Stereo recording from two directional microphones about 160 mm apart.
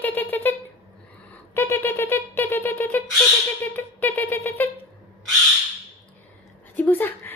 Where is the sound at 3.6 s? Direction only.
10° left (ahead or behind).